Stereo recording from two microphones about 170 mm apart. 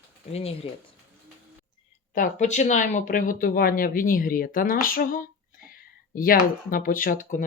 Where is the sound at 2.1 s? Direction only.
50° left (ahead or behind).